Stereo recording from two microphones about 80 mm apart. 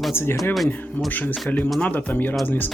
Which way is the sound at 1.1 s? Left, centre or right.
Left.